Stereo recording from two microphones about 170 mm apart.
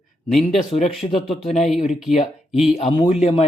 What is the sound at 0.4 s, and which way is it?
Speech, 35° left (ahead or behind).